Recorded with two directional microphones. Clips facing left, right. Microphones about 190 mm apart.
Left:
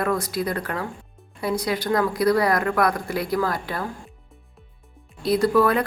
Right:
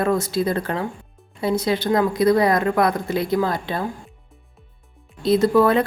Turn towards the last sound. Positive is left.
turn(degrees=-25)  # may be behind; listen again after turning